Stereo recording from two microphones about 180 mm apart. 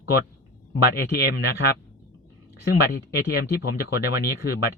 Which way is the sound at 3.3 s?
60° left (ahead or behind).